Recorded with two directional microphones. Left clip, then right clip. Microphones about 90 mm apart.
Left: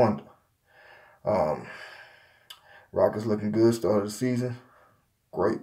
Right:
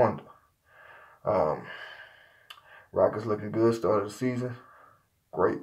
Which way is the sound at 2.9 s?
30° left (ahead or behind).